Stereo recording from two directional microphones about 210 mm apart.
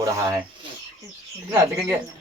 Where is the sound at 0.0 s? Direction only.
15° right (ahead or behind).